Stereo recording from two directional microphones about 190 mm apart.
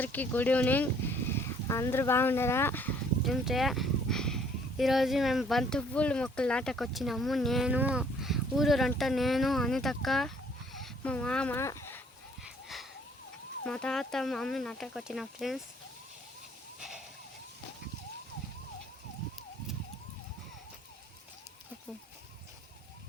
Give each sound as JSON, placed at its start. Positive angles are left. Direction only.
{"t": 0.0, "sound": "speech", "side_deg": 10}
{"t": 3.4, "sound": "speech", "side_deg": 0}
{"t": 12.4, "sound": "a sound", "side_deg": 0}
{"t": 13.7, "sound": "speech", "side_deg": 5}